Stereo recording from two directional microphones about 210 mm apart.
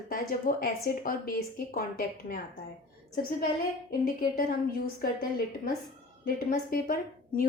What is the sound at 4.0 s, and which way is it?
A woman's voice, 45° left (ahead or behind).